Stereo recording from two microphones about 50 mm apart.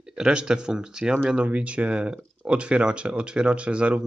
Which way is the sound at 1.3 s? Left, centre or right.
Right.